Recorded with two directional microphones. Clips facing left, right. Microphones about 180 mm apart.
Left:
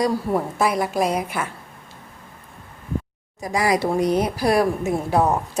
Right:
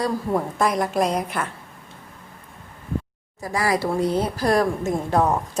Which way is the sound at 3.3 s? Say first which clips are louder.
Left 2 dB; 15° left (ahead or behind).